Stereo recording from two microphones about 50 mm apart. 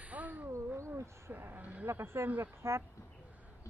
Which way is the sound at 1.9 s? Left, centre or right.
Right.